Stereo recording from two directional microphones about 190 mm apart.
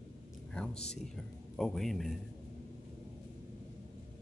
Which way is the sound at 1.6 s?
Centre (ahead or behind).